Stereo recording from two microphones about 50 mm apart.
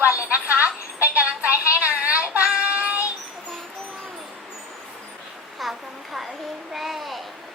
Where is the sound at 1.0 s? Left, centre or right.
Right.